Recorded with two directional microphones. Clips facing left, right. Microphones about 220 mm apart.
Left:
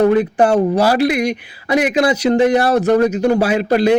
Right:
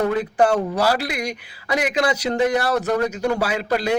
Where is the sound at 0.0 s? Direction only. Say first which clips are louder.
Left 6 dB; 20° left (ahead or behind).